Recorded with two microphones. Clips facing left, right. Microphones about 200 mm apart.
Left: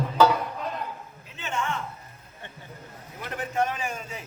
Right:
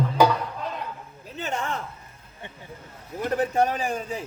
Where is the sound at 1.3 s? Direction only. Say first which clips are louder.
Right 2 dB; 35° right (ahead or behind).